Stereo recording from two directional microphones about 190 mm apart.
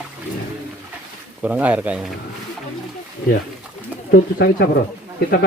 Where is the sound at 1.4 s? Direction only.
10° right (ahead or behind).